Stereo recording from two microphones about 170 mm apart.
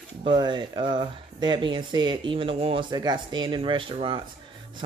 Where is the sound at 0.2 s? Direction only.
30° right (ahead or behind).